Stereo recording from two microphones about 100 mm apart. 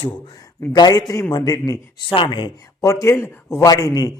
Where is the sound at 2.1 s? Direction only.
55° left (ahead or behind).